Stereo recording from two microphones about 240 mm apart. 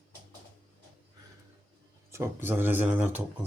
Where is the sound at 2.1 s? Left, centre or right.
Centre.